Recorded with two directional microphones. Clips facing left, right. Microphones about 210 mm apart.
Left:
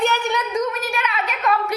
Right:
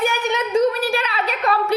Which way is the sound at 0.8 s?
35° right (ahead or behind).